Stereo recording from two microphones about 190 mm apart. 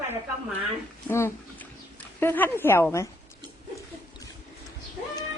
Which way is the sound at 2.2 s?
10° left (ahead or behind).